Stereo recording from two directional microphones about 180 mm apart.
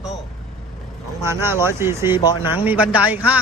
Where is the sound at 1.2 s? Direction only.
15° right (ahead or behind).